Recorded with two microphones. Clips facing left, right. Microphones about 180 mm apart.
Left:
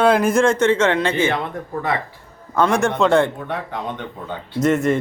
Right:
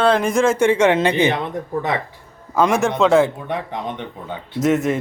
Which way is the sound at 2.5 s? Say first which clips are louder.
Right 1 dB; 5° right (ahead or behind).